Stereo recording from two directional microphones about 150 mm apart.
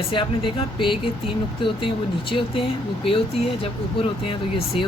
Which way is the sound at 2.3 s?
35° left (ahead or behind).